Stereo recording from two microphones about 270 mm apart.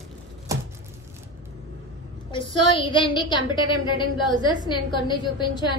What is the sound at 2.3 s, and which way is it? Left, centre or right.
A woman's voice, centre.